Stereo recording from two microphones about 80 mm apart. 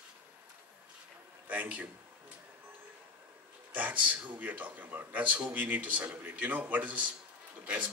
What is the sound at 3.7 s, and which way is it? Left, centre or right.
Speech, right.